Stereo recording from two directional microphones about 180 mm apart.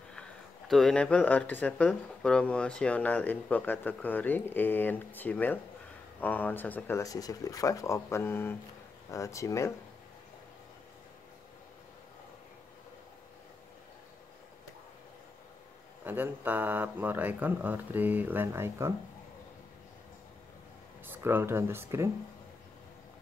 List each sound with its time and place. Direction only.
0.7 s speech: centre (ahead or behind)
16.0 s speech: 10° right (ahead or behind)
21.0 s speech: 10° right (ahead or behind)